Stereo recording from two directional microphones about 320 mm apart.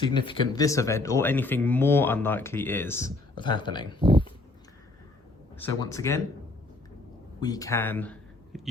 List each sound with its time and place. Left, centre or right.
0.0 s speech: centre
4.0 s pig: centre
5.5 s speech: centre
7.3 s speech: centre